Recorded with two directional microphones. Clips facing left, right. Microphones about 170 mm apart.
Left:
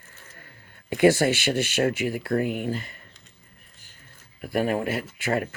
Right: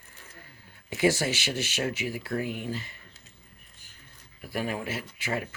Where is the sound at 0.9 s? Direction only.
60° left (ahead or behind).